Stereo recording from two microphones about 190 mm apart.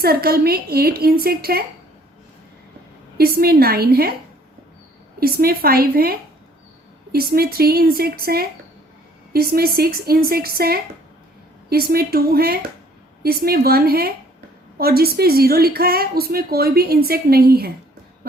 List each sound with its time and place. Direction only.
0.0 s a woman's voice: 55° right (ahead or behind)
3.2 s a woman's voice: 55° right (ahead or behind)
5.2 s a woman's voice: 55° right (ahead or behind)